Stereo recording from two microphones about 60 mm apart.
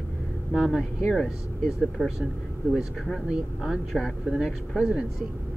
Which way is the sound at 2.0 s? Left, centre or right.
Left.